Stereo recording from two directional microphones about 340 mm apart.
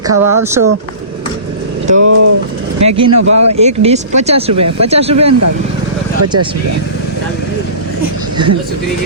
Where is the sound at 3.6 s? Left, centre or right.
Centre.